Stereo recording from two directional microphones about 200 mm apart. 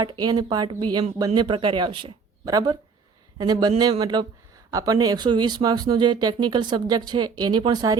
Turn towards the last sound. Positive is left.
turn(degrees=-20)  # may be behind; listen again after turning